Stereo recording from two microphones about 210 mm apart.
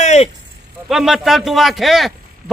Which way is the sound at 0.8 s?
Centre (ahead or behind).